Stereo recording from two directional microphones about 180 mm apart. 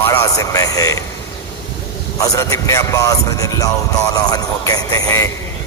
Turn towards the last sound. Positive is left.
turn(degrees=20)  # may be behind; listen again after turning